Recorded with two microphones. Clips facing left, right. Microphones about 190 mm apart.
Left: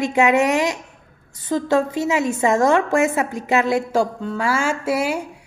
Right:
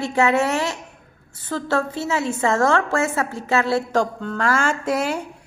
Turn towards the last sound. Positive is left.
turn(degrees=10)  # may be behind; listen again after turning